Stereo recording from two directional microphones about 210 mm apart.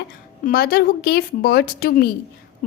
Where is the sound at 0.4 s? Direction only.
45° left (ahead or behind).